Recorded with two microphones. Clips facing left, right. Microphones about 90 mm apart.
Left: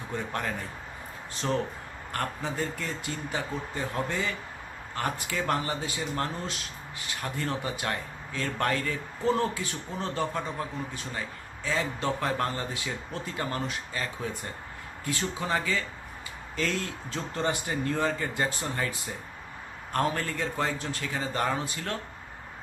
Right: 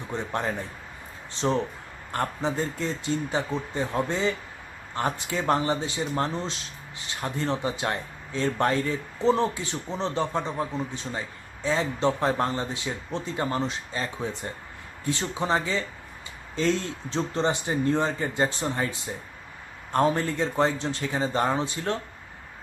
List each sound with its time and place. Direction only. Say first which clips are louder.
0.1 s speech: right 3 dB; 25° right (ahead or behind)